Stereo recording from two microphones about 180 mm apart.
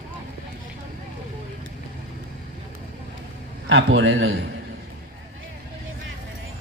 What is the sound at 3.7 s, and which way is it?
Speech, 90° right.